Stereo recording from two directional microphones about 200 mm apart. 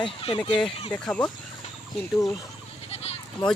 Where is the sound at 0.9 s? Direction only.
5° left (ahead or behind).